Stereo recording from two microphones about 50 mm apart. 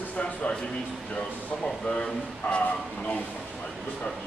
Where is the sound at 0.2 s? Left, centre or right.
Left.